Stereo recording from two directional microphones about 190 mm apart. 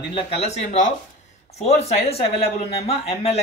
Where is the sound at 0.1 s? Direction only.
35° left (ahead or behind).